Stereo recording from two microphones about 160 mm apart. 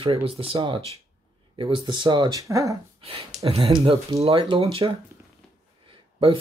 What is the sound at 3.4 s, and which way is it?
Speech, 35° right (ahead or behind).